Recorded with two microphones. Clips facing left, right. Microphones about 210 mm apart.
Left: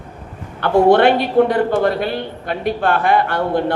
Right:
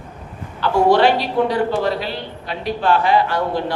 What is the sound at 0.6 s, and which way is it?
A man's voice, 55° left (ahead or behind).